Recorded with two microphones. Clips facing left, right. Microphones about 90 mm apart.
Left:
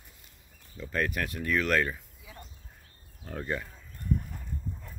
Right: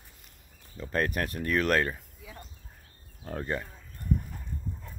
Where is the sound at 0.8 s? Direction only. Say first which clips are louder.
Right 2 dB; 40° right (ahead or behind).